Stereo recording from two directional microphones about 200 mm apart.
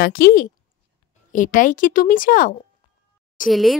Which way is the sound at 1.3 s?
40° left (ahead or behind).